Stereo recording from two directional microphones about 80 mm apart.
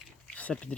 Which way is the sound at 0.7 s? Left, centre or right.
Centre.